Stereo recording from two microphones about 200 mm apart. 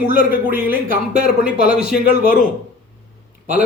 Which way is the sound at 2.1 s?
50° left (ahead or behind).